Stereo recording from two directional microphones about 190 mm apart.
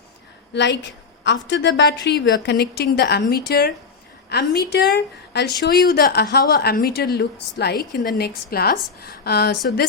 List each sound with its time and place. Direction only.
0.5 s a woman's voice: 65° left (ahead or behind)